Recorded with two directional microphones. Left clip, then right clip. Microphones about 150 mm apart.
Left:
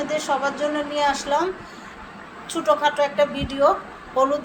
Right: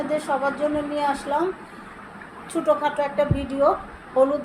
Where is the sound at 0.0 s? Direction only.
45° right (ahead or behind).